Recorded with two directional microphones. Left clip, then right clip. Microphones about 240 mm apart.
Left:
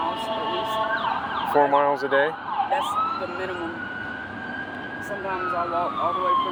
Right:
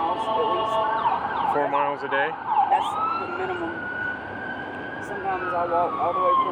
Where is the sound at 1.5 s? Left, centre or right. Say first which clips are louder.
Left 6 dB; left.